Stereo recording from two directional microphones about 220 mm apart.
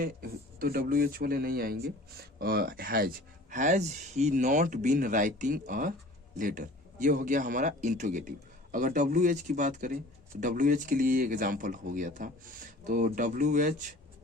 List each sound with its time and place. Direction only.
0.0 s speech: 40° right (ahead or behind)